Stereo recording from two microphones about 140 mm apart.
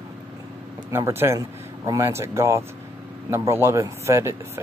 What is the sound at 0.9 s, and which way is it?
Speech, 20° right (ahead or behind).